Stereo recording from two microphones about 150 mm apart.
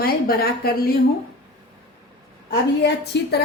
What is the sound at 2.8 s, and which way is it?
Speech, 90° left.